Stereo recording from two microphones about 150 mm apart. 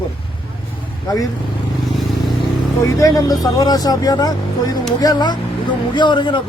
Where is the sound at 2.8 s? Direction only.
25° left (ahead or behind).